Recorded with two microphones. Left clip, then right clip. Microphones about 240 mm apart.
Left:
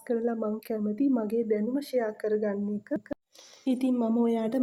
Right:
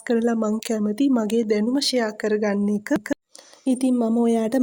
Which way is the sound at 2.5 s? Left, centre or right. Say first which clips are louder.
Right 9 dB; right.